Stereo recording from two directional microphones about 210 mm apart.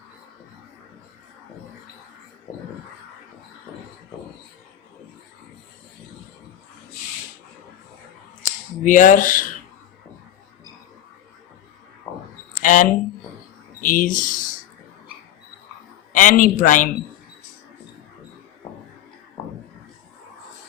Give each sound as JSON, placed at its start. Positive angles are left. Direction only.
{"t": 8.8, "sound": "a man's voice", "side_deg": 40}
{"t": 12.5, "sound": "a sound", "side_deg": 40}
{"t": 13.8, "sound": "speech", "side_deg": 40}
{"t": 16.1, "sound": "a man's voice", "side_deg": 40}